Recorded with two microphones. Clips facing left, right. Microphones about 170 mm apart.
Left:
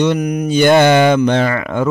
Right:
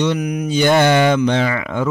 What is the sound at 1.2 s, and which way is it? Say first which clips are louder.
Speech: left 3 dB; 50° left (ahead or behind).